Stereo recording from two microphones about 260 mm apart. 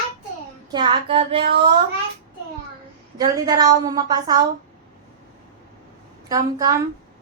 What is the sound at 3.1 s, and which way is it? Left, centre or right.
A woman's voice, centre.